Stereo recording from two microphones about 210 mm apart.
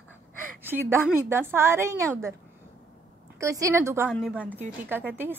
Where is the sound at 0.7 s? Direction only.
10° right (ahead or behind).